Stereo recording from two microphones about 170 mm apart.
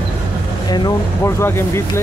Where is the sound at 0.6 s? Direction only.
20° left (ahead or behind).